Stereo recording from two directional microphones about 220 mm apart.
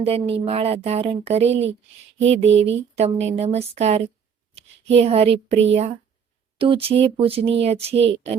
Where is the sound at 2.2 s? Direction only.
55° right (ahead or behind).